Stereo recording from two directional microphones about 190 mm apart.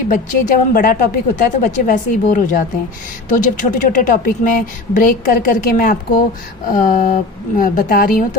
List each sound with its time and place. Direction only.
0.1 s a woman's voice: 45° left (ahead or behind)